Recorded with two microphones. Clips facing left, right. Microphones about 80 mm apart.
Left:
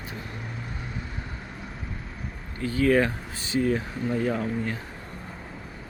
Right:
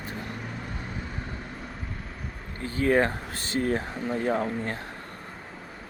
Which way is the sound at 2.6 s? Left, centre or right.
Right.